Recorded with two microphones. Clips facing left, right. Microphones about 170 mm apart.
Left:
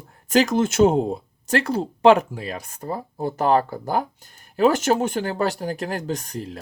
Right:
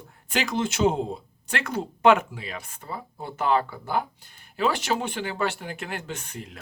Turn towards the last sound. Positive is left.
turn(degrees=40)  # may be behind; listen again after turning